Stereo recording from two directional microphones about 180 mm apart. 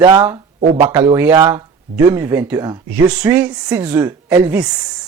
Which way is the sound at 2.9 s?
10° right (ahead or behind).